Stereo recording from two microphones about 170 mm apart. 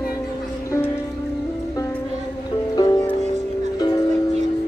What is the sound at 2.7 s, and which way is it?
Music, 25° left (ahead or behind).